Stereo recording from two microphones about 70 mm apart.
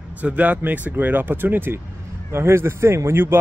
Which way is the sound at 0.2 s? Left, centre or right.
Right.